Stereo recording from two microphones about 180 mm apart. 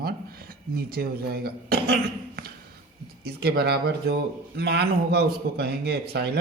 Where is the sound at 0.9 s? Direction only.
60° right (ahead or behind).